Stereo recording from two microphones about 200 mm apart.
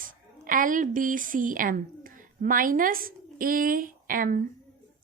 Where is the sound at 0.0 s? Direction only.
45° right (ahead or behind).